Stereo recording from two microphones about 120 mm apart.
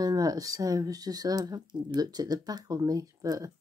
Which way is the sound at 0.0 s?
30° right (ahead or behind).